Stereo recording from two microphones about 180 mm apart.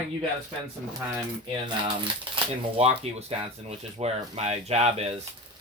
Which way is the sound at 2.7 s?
35° right (ahead or behind).